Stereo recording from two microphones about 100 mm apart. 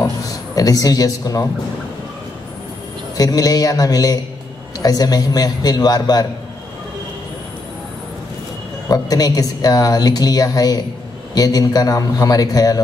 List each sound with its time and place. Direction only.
0.0 s a man's voice: 35° left (ahead or behind)
3.2 s speech: 35° left (ahead or behind)
8.8 s speech: 40° left (ahead or behind)